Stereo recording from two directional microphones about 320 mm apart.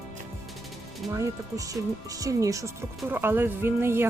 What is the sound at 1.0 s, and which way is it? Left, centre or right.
Speech, centre.